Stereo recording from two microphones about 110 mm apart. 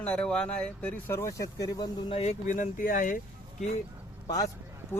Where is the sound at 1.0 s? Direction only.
25° left (ahead or behind).